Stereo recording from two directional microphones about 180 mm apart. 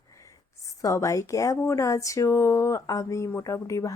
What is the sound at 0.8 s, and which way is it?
Speech, 20° left (ahead or behind).